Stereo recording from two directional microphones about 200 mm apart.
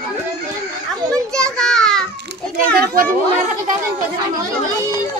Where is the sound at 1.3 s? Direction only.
5° left (ahead or behind).